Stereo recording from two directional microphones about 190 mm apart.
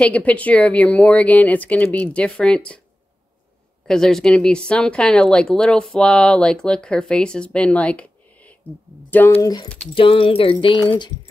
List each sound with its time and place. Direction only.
0.0 s speech: 5° left (ahead or behind)
3.8 s speech: centre (ahead or behind); by 9.7 s 20° left (ahead or behind)
9.9 s a sound: 30° left (ahead or behind)